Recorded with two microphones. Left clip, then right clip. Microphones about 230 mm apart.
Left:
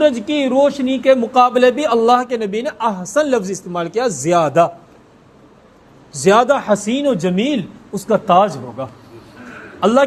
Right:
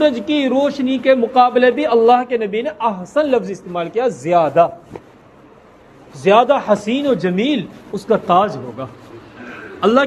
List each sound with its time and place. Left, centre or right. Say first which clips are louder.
0.0 s speech: left 1 dB; left
6.2 s a man's voice: even; left